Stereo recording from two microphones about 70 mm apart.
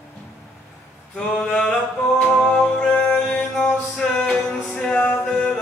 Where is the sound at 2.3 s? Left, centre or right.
Centre.